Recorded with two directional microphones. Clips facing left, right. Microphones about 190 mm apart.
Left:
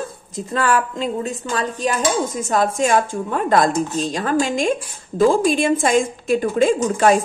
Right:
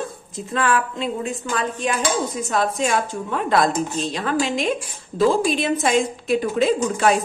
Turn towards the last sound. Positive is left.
turn(degrees=45)  # may be behind; listen again after turning